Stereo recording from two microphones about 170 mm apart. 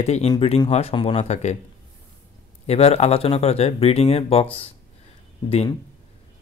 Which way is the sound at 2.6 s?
35° left (ahead or behind).